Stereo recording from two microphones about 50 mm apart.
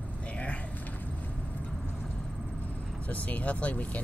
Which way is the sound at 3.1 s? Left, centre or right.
Left.